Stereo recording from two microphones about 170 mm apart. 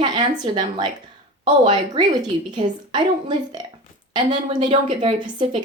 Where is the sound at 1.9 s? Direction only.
25° right (ahead or behind).